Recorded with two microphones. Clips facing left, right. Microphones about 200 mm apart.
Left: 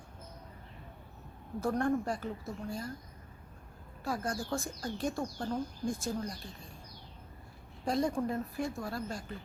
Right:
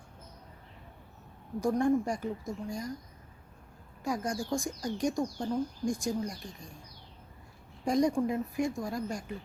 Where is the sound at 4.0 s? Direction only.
15° right (ahead or behind).